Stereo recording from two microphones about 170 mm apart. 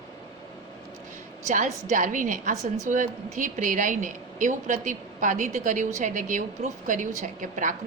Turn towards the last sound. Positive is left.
turn(degrees=-50)  # may be behind; listen again after turning